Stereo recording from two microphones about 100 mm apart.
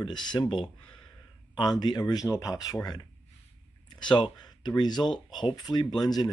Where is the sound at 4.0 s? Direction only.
50° left (ahead or behind).